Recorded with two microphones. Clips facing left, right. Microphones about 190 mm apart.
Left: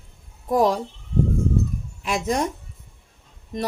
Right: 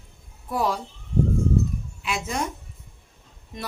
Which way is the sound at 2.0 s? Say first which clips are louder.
Left 6 dB; 40° left (ahead or behind).